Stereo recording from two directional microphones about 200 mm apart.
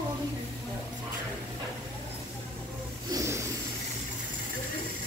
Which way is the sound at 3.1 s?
15° right (ahead or behind).